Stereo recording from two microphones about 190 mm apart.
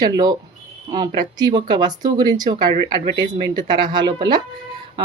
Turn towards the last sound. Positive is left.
turn(degrees=-25)  # may be behind; listen again after turning